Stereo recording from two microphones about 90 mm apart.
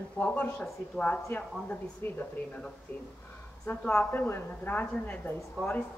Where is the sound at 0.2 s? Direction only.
20° left (ahead or behind).